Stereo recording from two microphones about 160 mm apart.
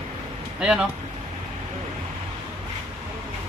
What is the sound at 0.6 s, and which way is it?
Speech, 5° right (ahead or behind).